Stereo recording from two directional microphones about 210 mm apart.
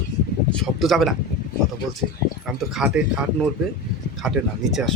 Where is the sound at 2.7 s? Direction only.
5° right (ahead or behind).